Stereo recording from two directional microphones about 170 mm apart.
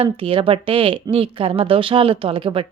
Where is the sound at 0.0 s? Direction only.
30° right (ahead or behind).